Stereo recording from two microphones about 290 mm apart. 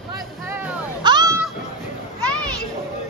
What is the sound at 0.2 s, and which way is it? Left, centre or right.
Music, centre.